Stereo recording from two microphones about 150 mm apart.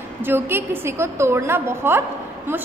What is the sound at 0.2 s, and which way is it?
A woman's voice, 15° right (ahead or behind).